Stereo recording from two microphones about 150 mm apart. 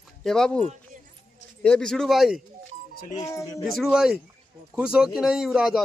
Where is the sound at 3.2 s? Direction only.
20° left (ahead or behind).